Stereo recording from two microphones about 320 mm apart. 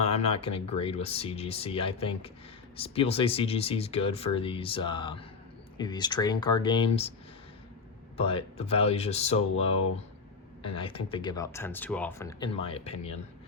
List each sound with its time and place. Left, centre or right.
0.0 s speech: centre
8.1 s speech: centre